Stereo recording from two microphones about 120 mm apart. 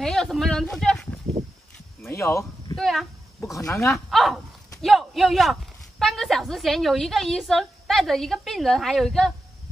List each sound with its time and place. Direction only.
0.0 s speech: centre (ahead or behind)
2.0 s a sound: 25° left (ahead or behind)
2.8 s speech: centre (ahead or behind)
3.5 s speech: 25° left (ahead or behind)
3.9 s a woman's voice: centre (ahead or behind)